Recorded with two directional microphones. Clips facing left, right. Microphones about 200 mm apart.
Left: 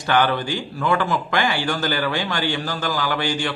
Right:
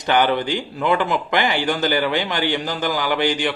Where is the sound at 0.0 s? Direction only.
20° right (ahead or behind).